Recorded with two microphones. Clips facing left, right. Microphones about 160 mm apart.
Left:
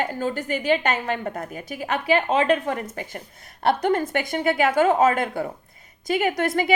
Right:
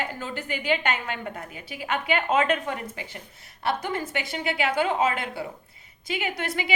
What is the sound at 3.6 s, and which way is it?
A woman's voice, 60° left (ahead or behind).